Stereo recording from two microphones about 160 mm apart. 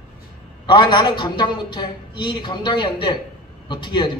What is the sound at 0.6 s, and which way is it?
A man's voice, 25° left (ahead or behind).